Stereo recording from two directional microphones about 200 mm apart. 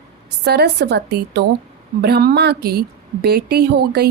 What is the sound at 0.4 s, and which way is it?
A woman's voice, 55° right (ahead or behind).